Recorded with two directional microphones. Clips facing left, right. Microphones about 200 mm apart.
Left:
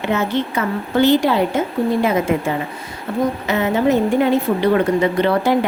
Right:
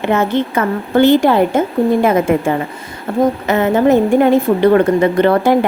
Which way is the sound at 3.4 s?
50° right (ahead or behind).